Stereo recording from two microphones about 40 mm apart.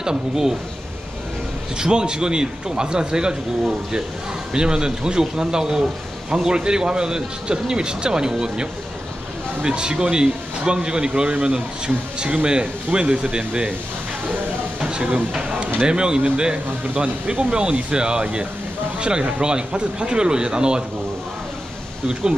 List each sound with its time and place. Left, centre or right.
0.0 s a man's voice: centre
1.8 s speech: right
4.5 s speech: right
9.6 s speech: right
14.8 s a sound: right
15.4 s speech: right
16.9 s speech: right
22.0 s speech: centre